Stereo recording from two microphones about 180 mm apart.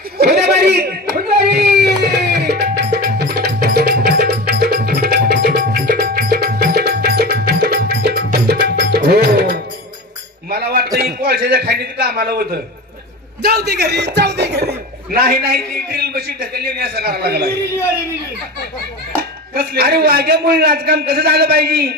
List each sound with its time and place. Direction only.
0.2 s a sound: 60° right (ahead or behind)
13.4 s a man's voice: 60° right (ahead or behind)
19.5 s a man's voice: 60° right (ahead or behind)